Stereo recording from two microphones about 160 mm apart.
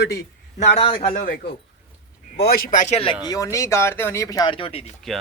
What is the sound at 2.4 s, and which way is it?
Speech, 70° left (ahead or behind).